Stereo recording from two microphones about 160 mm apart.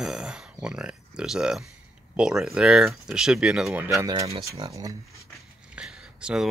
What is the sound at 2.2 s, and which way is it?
Speech, 5° right (ahead or behind).